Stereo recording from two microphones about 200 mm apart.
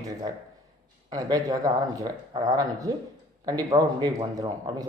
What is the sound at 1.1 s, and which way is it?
A man's voice, 20° right (ahead or behind).